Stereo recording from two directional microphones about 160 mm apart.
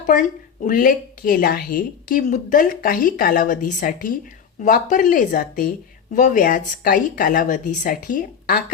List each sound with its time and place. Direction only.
0.0 s a woman's voice: 50° left (ahead or behind)